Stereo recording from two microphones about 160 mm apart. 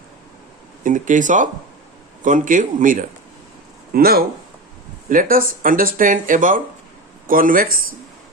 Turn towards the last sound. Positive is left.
turn(degrees=-65)  # may be behind; listen again after turning